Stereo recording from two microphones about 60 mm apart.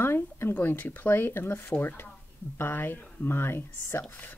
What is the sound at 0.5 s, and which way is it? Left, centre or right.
Speech, left.